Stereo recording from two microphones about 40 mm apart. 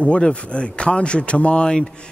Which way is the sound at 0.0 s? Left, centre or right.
Left.